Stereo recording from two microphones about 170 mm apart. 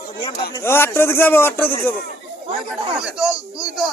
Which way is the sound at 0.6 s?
15° left (ahead or behind).